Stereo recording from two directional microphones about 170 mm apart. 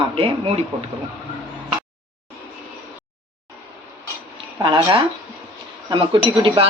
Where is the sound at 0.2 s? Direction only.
35° right (ahead or behind).